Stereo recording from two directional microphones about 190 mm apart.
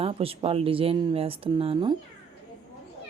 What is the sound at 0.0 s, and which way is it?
Speech, 30° right (ahead or behind).